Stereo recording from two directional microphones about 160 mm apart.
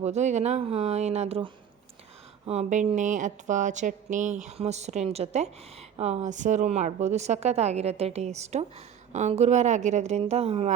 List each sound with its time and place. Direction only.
0.0 s speech: 45° right (ahead or behind)
2.5 s speech: 45° right (ahead or behind)